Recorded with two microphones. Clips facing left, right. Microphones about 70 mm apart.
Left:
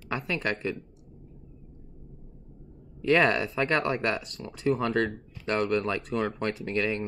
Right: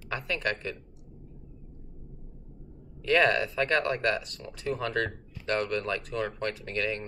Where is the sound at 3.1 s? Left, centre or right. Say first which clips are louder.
Even; centre.